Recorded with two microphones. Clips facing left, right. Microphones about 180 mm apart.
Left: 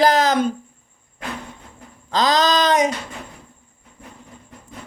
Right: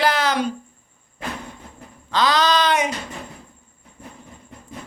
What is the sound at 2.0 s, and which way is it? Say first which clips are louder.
Speech: left 1 dB; 40° left (ahead or behind).